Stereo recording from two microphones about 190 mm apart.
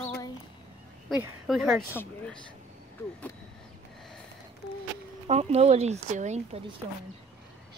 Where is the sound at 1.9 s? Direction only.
10° left (ahead or behind).